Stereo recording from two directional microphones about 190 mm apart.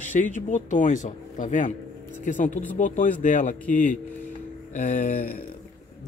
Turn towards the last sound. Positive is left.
turn(degrees=50)  # may be behind; listen again after turning